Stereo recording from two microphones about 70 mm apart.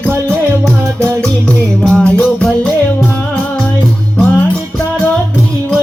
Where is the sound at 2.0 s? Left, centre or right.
Centre.